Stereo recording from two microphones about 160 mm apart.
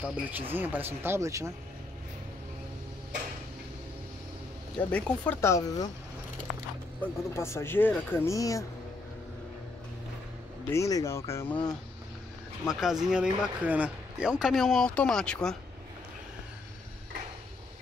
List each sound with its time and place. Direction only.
0.0 s speech: 10° right (ahead or behind)
4.9 s speech: 10° left (ahead or behind)
7.0 s speech: 15° left (ahead or behind)
10.7 s speech: 20° left (ahead or behind)
12.6 s speech: 5° right (ahead or behind)